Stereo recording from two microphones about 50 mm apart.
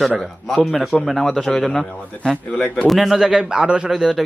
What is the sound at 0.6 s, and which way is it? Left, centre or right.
A man's voice, centre.